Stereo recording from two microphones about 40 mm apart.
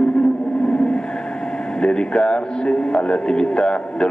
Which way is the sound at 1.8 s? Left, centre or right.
Left.